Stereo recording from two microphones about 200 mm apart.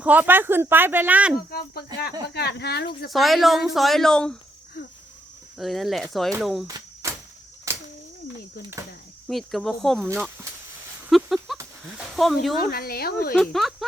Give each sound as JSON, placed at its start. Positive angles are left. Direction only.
{"t": 0.0, "sound": "speech", "side_deg": -10}
{"t": 1.4, "sound": "speech", "side_deg": 50}
{"t": 3.1, "sound": "speech", "side_deg": 0}
{"t": 5.5, "sound": "speech", "side_deg": 0}
{"t": 6.7, "sound": "cricket", "side_deg": -15}
{"t": 7.7, "sound": "a sound", "side_deg": -15}
{"t": 9.2, "sound": "speech", "side_deg": 0}
{"t": 11.1, "sound": "a sound", "side_deg": 0}
{"t": 12.1, "sound": "speech", "side_deg": 0}
{"t": 12.6, "sound": "speech", "side_deg": 50}
{"t": 13.3, "sound": "speech", "side_deg": 0}